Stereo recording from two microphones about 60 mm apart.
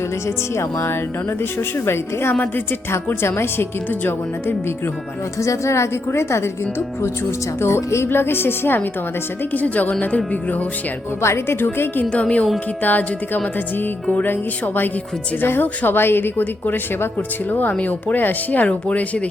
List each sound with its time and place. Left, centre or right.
0.3 s speech: left
5.4 s speech: left
9.4 s a woman's voice: left
11.2 s a woman's voice: left
12.0 s a woman's voice: centre
15.4 s a woman's voice: left